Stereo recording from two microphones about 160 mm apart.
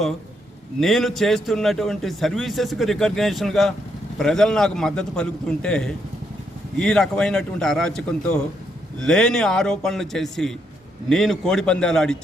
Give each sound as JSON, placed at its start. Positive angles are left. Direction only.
{"t": 0.8, "sound": "a man's voice", "side_deg": 0}